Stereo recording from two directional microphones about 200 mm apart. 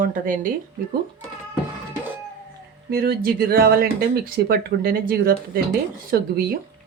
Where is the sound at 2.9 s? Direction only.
50° right (ahead or behind).